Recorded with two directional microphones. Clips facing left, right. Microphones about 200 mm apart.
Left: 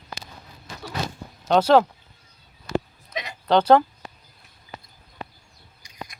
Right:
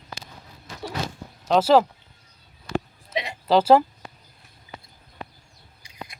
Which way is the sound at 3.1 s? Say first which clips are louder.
Right 4 dB; 30° right (ahead or behind).